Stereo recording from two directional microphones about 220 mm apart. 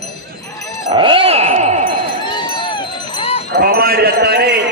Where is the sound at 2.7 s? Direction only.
25° left (ahead or behind).